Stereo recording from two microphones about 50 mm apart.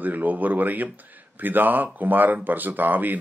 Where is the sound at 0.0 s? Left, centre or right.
Right.